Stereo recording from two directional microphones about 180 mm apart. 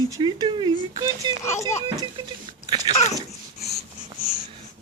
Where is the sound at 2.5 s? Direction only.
25° right (ahead or behind).